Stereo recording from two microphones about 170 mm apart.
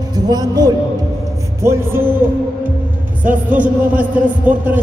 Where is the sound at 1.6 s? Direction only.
15° right (ahead or behind).